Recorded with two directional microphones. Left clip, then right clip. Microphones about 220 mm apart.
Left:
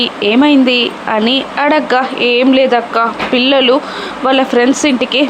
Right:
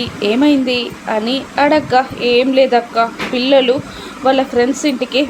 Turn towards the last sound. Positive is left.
turn(degrees=15)  # may be behind; listen again after turning